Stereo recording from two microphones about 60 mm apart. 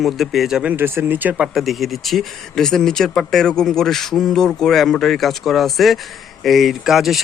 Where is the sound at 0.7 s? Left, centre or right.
Right.